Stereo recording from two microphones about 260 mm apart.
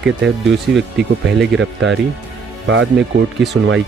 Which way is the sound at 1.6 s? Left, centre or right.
Right.